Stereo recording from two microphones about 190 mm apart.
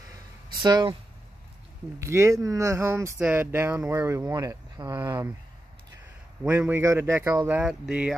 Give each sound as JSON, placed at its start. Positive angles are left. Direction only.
{"t": 0.6, "sound": "speech", "side_deg": -25}
{"t": 2.0, "sound": "speech", "side_deg": -15}
{"t": 6.4, "sound": "speech", "side_deg": -10}